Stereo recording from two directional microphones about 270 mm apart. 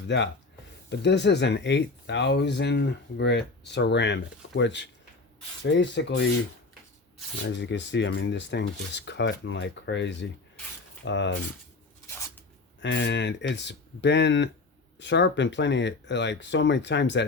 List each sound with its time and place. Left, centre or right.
0.9 s speech: left
7.4 s speech: left
12.8 s speech: left